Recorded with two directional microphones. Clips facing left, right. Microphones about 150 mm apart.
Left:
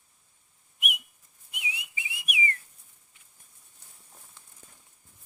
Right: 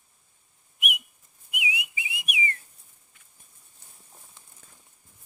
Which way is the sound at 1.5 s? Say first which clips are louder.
Right 6 dB; 10° right (ahead or behind).